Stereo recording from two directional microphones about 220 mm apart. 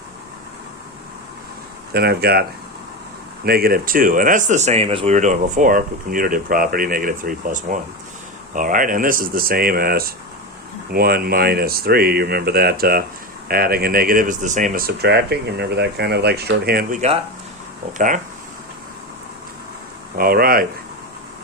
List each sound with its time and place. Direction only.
1.9 s speech: 45° right (ahead or behind)
3.4 s speech: 45° right (ahead or behind)
20.1 s speech: 40° right (ahead or behind)